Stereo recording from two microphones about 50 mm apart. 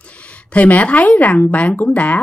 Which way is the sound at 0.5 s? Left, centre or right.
Left.